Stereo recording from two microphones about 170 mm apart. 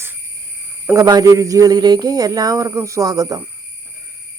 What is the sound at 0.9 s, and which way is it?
A man's voice, 20° right (ahead or behind).